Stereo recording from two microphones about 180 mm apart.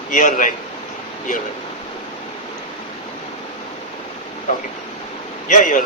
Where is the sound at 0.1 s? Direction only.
45° left (ahead or behind).